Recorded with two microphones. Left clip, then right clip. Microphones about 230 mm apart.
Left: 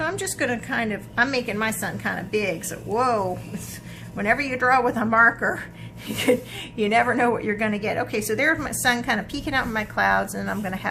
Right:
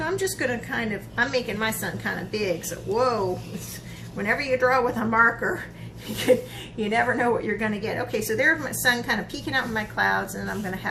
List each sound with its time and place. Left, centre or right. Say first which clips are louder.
0.0 s a woman's voice: even; left
4.2 s a woman's voice: left 1 dB; left
6.7 s a woman's voice: left 3 dB; left